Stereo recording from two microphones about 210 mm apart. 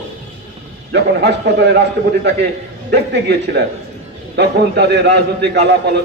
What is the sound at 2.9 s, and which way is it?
A man's voice, 55° right (ahead or behind).